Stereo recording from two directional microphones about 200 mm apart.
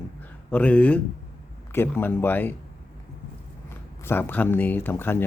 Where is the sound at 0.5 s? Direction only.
5° left (ahead or behind).